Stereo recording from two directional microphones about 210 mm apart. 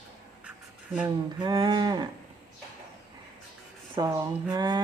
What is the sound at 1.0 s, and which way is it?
Speech, 20° right (ahead or behind).